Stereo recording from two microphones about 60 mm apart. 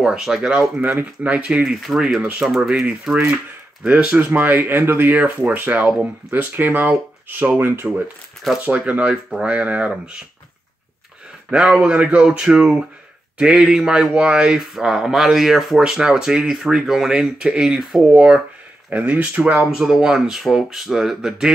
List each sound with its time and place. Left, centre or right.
0.0 s speech: centre
0.7 s speech: right
1.2 s speech: centre
1.6 s speech: centre
3.8 s speech: right
4.2 s speech: right
8.6 s speech: right
11.5 s speech: centre
11.9 s speech: right
12.4 s speech: centre; by 19.6 s right
19.7 s speech: centre